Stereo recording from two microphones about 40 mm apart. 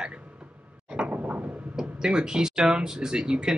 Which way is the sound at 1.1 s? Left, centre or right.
Right.